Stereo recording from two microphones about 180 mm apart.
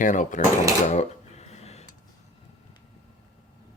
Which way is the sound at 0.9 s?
40° left (ahead or behind).